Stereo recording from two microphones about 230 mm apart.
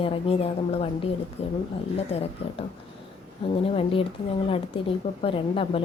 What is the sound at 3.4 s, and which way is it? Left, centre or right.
A woman's voice, left.